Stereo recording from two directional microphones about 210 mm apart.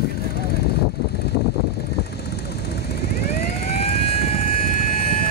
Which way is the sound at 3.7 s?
30° left (ahead or behind).